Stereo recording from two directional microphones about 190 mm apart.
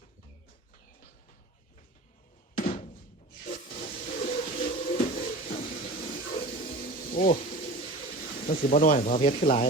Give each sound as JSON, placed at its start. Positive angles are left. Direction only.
{"t": 2.6, "sound": "thunk", "side_deg": 45}
{"t": 3.4, "sound": "a sound", "side_deg": 45}
{"t": 6.6, "sound": "sizzle", "side_deg": 30}
{"t": 6.8, "sound": "music", "side_deg": 45}
{"t": 7.5, "sound": "bird", "side_deg": 35}